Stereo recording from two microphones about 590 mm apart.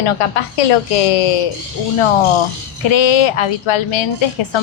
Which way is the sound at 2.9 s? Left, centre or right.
Left.